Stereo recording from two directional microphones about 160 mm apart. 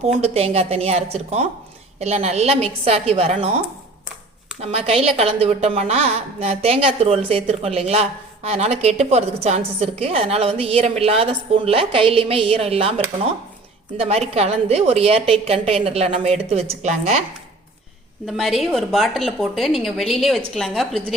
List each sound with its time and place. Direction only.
0.2 s a woman's voice: 40° right (ahead or behind)
4.6 s a woman's voice: 40° right (ahead or behind)
18.3 s a woman's voice: centre (ahead or behind)